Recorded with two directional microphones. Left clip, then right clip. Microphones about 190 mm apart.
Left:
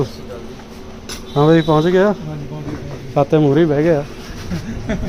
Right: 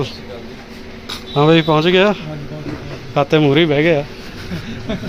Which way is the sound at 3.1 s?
10° left (ahead or behind).